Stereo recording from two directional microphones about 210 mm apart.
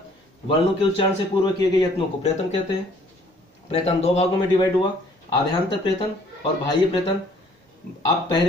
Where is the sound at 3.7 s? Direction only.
30° left (ahead or behind).